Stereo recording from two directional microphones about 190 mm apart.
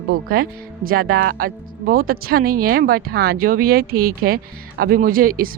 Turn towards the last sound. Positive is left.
turn(degrees=-50)  # may be behind; listen again after turning